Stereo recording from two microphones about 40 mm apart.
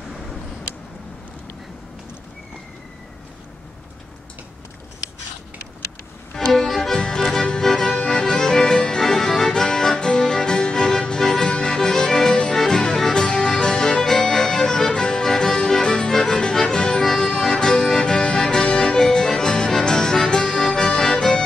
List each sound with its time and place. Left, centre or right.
6.3 s music: centre